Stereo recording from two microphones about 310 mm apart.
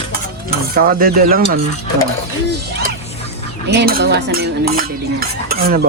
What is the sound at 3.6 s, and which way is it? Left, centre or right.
Stir, right.